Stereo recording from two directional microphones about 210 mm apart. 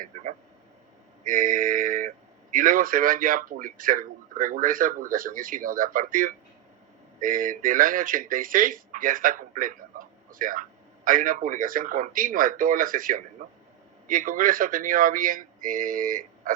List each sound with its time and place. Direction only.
1.2 s speech: 40° right (ahead or behind)